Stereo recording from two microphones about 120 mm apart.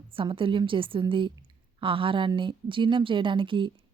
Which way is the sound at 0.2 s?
45° right (ahead or behind).